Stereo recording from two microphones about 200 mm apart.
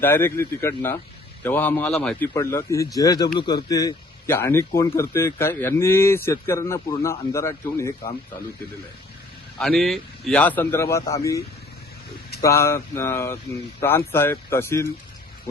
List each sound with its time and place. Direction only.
0.0 s a man's voice: 10° left (ahead or behind)
9.6 s a man's voice: centre (ahead or behind)